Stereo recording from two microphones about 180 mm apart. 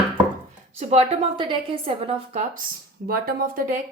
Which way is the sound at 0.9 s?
35° right (ahead or behind).